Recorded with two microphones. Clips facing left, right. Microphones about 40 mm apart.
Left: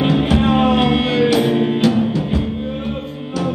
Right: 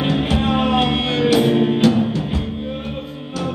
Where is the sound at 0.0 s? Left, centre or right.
Centre.